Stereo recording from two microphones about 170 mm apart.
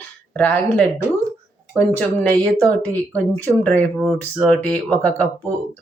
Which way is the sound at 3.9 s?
Centre (ahead or behind).